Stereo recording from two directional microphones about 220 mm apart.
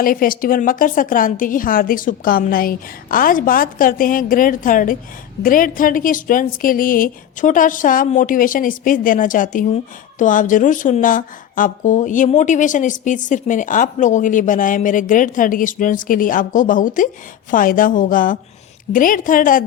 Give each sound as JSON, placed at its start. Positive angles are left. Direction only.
{"t": 0.0, "sound": "speech", "side_deg": 40}